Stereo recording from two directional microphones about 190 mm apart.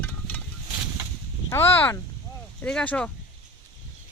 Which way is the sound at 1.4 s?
10° left (ahead or behind).